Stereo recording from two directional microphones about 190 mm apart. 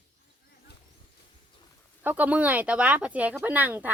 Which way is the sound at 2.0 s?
10° right (ahead or behind).